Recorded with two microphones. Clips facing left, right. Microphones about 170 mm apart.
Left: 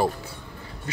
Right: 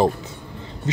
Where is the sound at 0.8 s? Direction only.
20° right (ahead or behind).